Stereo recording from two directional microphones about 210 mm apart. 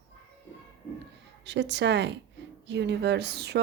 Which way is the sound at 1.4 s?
55° right (ahead or behind).